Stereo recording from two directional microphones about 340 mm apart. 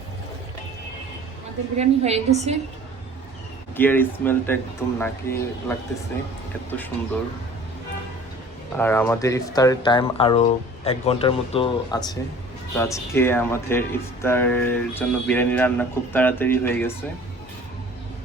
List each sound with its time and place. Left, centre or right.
1.7 s a woman's voice: centre
3.8 s speech: centre
8.7 s speech: centre